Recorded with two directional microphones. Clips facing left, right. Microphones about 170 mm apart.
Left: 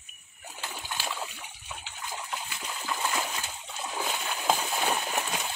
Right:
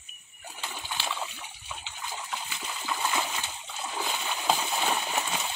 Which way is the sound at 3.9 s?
Centre (ahead or behind).